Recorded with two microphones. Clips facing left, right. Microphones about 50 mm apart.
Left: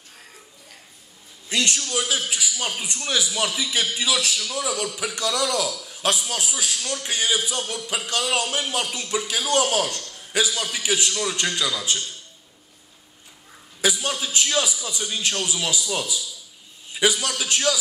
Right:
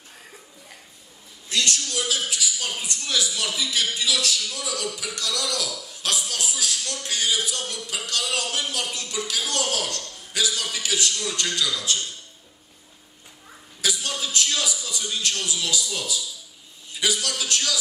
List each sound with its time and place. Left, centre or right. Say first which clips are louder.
1.5 s a man's voice: left 2 dB; left
13.7 s a man's voice: left 4 dB; left